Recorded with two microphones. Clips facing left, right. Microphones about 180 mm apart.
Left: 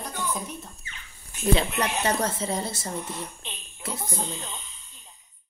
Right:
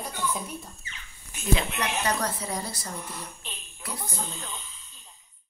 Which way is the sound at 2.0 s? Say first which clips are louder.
Left 3 dB; 25° left (ahead or behind).